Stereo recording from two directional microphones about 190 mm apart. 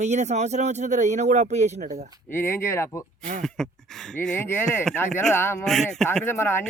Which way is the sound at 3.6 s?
5° left (ahead or behind).